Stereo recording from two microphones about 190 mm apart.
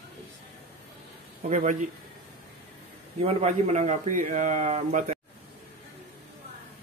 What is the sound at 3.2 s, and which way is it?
Speech, 35° right (ahead or behind).